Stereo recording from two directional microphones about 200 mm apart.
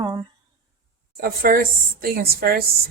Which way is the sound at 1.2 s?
45° right (ahead or behind).